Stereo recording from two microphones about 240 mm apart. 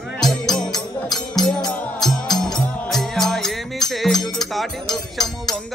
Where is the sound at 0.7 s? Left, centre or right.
Centre.